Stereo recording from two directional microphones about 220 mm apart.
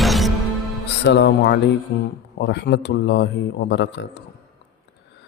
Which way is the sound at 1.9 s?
45° left (ahead or behind).